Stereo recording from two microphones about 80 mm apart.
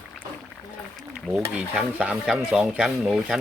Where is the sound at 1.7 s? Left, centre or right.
Centre.